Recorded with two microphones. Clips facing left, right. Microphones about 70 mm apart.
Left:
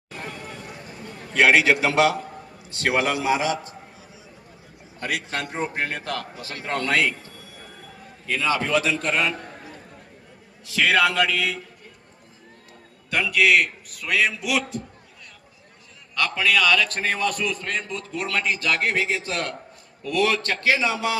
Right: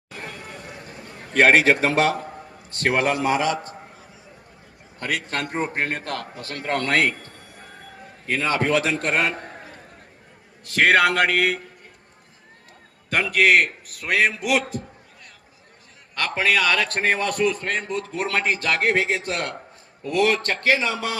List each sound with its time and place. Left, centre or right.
1.3 s a man's voice: right
4.9 s a man's voice: right
10.6 s a man's voice: right
13.1 s a man's voice: right
16.1 s a man's voice: right